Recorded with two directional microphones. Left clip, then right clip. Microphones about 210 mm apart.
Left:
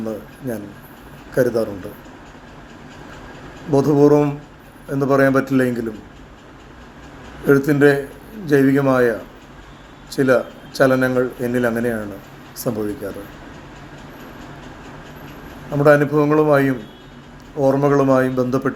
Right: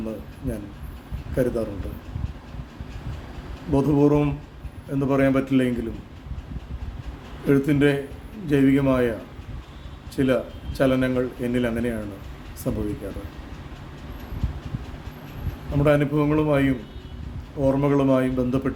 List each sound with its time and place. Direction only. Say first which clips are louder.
0.0 s a man's voice: left 5 dB; 5° right (ahead or behind)
3.7 s a man's voice: left 6 dB; 5° right (ahead or behind)
7.4 s a man's voice: left 7 dB; 5° right (ahead or behind)
10.2 s a man's voice: left 7 dB; 5° right (ahead or behind)
15.8 s speech: left 7 dB; 5° right (ahead or behind)